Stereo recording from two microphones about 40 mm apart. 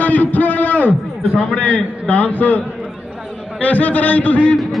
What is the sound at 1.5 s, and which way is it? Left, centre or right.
A man's voice, left.